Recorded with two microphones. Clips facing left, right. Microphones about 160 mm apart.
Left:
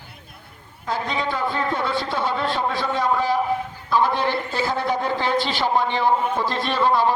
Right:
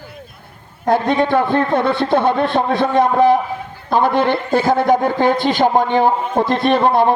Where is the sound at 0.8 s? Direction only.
60° right (ahead or behind).